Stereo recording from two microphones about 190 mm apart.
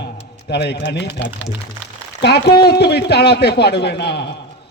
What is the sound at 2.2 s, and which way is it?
A man's voice, 60° left (ahead or behind).